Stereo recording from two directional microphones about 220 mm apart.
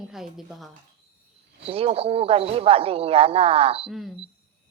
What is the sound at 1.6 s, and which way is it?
Speech, 25° right (ahead or behind).